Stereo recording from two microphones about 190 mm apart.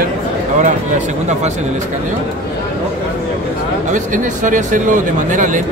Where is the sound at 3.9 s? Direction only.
40° right (ahead or behind).